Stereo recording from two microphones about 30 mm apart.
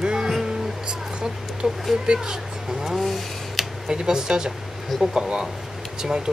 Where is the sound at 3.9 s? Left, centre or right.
Right.